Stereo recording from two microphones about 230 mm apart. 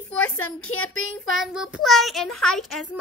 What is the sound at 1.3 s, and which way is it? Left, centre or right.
Child singing, centre.